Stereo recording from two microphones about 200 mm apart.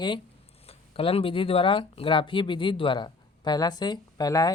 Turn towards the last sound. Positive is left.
turn(degrees=15)  # may be behind; listen again after turning